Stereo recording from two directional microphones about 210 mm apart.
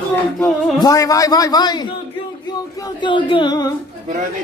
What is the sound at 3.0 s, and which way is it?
Speech, 20° left (ahead or behind).